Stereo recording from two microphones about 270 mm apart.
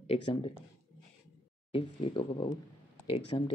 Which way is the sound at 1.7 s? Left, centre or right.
Centre.